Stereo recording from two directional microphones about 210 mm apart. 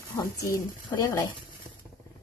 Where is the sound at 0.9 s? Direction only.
20° left (ahead or behind).